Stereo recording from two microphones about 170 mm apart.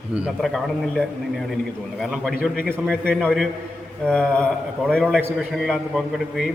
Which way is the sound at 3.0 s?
5° left (ahead or behind).